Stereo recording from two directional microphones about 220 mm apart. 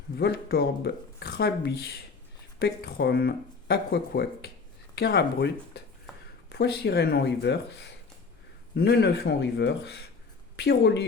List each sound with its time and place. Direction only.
0.2 s speech: 45° left (ahead or behind)